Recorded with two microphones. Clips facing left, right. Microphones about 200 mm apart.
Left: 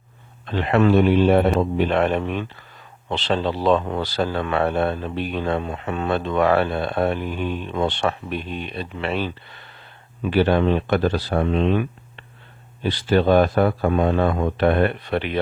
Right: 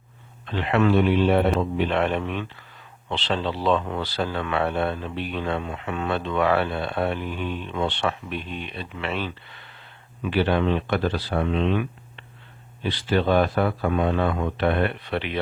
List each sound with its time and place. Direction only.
0.4 s speech: 40° left (ahead or behind)